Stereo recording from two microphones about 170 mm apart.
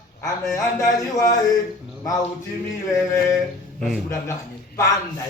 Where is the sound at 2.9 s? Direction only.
15° left (ahead or behind).